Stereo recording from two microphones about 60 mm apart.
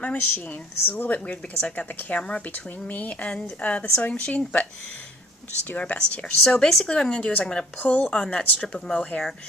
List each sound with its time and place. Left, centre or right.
0.0 s a woman's voice: left
5.7 s speech: left
7.8 s a woman's voice: left